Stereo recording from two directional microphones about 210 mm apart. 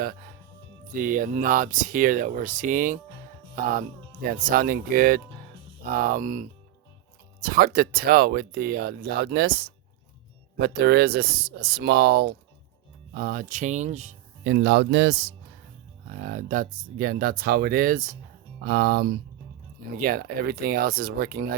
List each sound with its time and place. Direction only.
0.9 s speech: 40° right (ahead or behind)
16.0 s speech: 40° right (ahead or behind)